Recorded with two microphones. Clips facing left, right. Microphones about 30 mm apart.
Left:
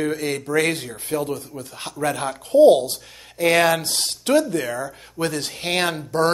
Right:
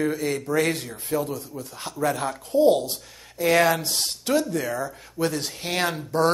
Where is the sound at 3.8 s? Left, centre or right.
Left.